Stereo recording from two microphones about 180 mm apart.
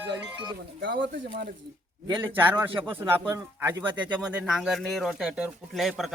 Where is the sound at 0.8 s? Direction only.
90° right.